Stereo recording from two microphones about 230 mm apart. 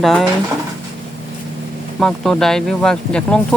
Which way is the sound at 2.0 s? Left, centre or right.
Centre.